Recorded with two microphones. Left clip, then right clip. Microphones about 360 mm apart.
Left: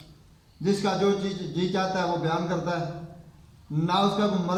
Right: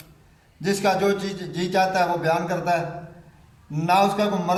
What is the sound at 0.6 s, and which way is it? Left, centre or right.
A man's voice, centre.